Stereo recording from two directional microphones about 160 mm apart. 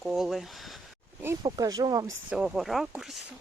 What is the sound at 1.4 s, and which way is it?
Speech, 25° right (ahead or behind).